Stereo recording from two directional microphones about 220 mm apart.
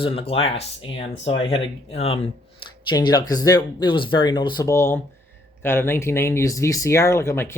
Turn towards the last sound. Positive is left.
turn(degrees=10)  # may be behind; listen again after turning